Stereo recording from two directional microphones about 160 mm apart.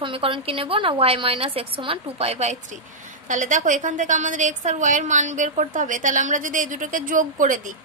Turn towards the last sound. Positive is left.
turn(degrees=-55)  # may be behind; listen again after turning